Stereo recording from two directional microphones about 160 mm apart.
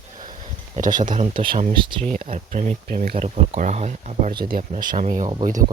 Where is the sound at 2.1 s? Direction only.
55° right (ahead or behind).